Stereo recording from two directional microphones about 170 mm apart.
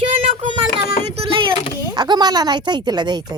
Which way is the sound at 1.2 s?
30° right (ahead or behind).